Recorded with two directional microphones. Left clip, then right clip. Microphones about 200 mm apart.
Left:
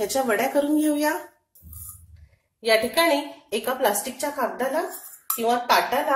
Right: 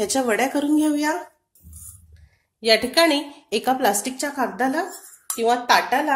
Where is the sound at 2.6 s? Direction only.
45° right (ahead or behind).